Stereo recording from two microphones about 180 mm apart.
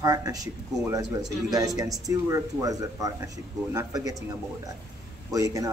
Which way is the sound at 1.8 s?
20° right (ahead or behind).